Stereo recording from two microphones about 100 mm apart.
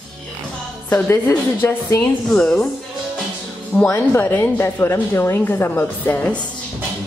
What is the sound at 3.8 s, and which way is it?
A woman's voice, 25° left (ahead or behind).